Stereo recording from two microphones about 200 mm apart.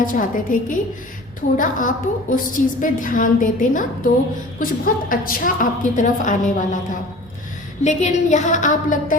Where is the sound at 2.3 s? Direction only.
40° left (ahead or behind).